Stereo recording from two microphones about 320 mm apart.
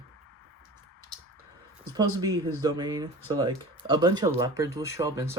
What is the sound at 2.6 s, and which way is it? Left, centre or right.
Speech, centre.